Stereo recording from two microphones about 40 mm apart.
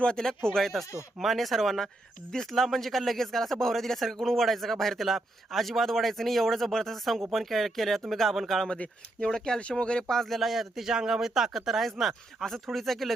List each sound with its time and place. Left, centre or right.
0.0 s speech: centre
0.6 s a man's voice: centre
9.6 s speech: left
10.2 s a man's voice: centre